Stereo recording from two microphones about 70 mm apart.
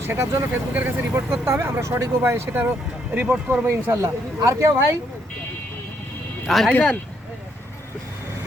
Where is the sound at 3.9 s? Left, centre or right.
Right.